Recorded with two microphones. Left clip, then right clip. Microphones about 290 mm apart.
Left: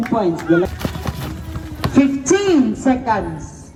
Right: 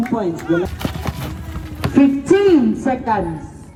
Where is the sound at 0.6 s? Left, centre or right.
Centre.